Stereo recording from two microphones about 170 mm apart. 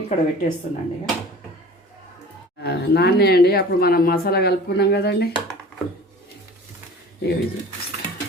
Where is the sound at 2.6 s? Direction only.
70° left (ahead or behind).